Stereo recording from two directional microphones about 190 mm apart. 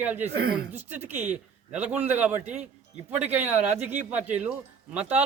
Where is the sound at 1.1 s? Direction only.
40° right (ahead or behind).